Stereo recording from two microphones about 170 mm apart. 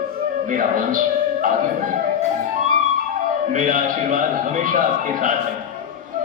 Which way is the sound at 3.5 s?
50° right (ahead or behind).